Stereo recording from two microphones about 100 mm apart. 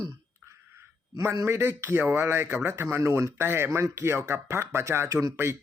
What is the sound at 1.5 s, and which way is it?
Speech, 25° right (ahead or behind).